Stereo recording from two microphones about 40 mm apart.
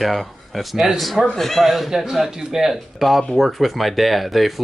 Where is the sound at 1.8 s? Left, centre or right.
Centre.